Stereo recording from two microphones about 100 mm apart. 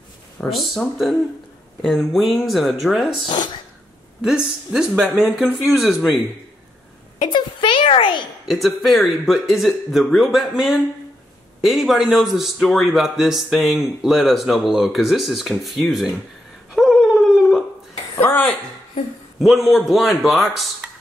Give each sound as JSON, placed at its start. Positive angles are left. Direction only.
{"t": 0.4, "sound": "a man's voice", "side_deg": 0}
{"t": 7.2, "sound": "a sound", "side_deg": 55}
{"t": 8.5, "sound": "a man's voice", "side_deg": 0}
{"t": 16.7, "sound": "a sound", "side_deg": -5}
{"t": 18.2, "sound": "speech", "side_deg": 15}
{"t": 19.4, "sound": "a man's voice", "side_deg": 0}